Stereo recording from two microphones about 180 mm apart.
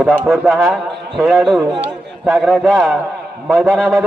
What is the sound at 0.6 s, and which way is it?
A man's voice, centre (ahead or behind).